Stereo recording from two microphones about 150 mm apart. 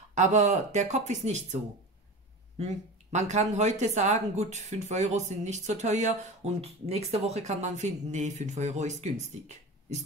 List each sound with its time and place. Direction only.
0.1 s speech: 50° right (ahead or behind)